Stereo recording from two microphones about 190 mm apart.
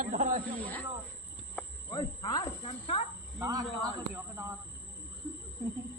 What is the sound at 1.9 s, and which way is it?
Snake, 20° left (ahead or behind).